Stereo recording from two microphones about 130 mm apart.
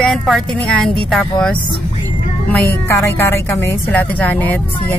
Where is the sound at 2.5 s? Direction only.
20° left (ahead or behind).